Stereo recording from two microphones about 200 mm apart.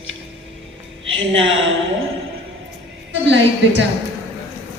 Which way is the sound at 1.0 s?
75° right (ahead or behind).